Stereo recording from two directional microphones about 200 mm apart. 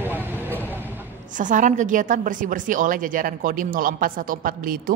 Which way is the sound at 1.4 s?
40° right (ahead or behind).